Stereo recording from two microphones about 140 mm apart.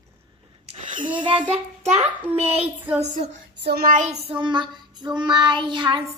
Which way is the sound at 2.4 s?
45° right (ahead or behind).